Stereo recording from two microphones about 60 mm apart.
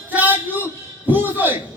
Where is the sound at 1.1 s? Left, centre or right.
Right.